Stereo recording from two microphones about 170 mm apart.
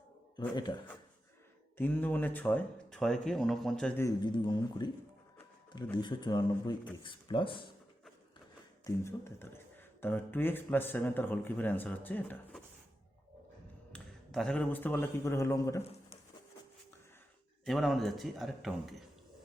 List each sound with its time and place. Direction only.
0.3 s speech: 25° left (ahead or behind)
1.8 s speech: 10° left (ahead or behind)
4.2 s speech: 25° left (ahead or behind)
8.8 s speech: 15° left (ahead or behind)
13.9 s a man's voice: 5° left (ahead or behind)
17.7 s a man's voice: centre (ahead or behind)